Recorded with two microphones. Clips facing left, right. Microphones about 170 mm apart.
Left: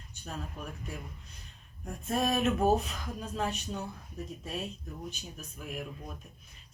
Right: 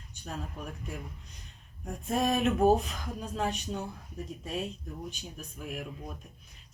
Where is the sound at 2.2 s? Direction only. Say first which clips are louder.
Right 1 dB; 5° left (ahead or behind).